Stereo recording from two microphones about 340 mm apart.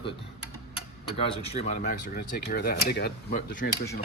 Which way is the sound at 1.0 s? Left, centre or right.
Centre.